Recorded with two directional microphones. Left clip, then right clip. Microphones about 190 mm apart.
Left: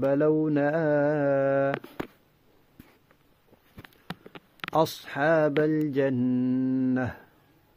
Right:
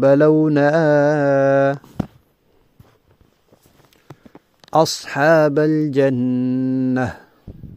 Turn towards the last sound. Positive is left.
turn(degrees=-45)  # may be behind; listen again after turning